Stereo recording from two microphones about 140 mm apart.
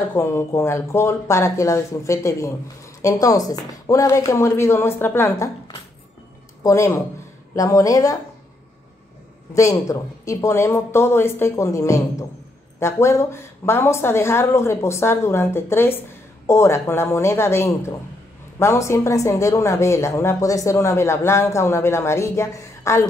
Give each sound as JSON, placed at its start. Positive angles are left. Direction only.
{"t": 0.1, "sound": "speech", "side_deg": 20}
{"t": 6.6, "sound": "speech", "side_deg": 20}
{"t": 9.5, "sound": "speech", "side_deg": 25}